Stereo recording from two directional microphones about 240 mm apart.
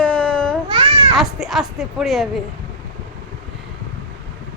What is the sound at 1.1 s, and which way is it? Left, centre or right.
Speech, centre.